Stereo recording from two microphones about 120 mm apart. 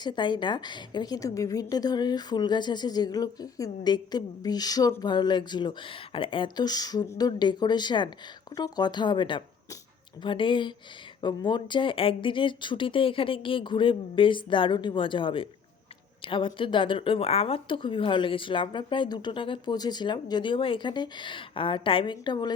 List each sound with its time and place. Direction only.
0.0 s a woman's voice: 40° left (ahead or behind)